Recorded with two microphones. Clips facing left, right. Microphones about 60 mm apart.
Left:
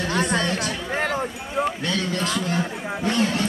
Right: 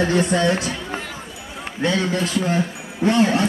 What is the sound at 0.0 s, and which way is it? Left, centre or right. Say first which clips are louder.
Speech: right 5 dB; right.